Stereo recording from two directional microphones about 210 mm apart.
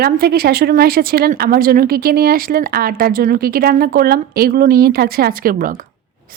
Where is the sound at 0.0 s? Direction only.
45° right (ahead or behind).